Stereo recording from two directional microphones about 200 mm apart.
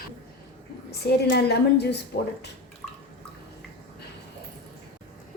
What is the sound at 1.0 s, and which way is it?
Speech, 55° left (ahead or behind).